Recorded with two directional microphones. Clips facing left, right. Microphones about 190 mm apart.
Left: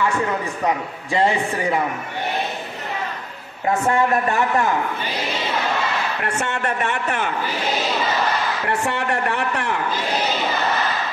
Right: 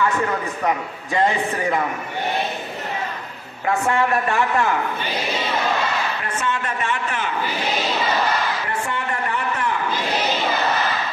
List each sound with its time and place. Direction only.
3.6 s a man's voice: 20° left (ahead or behind)
6.2 s a man's voice: 70° left (ahead or behind)
8.6 s a man's voice: 75° left (ahead or behind)